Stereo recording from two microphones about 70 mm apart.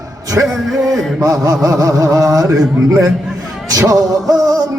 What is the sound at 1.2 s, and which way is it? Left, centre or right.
Music, right.